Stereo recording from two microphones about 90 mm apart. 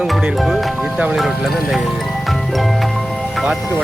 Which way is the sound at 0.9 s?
15° right (ahead or behind).